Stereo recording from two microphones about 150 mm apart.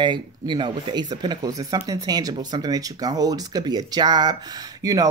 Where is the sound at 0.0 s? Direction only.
30° right (ahead or behind).